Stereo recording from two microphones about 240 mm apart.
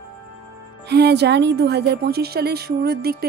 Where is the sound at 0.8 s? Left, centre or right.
Right.